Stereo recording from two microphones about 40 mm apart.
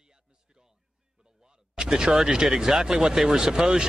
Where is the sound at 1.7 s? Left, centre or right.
Centre.